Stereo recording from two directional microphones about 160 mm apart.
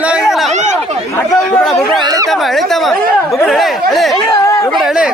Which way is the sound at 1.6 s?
Centre (ahead or behind).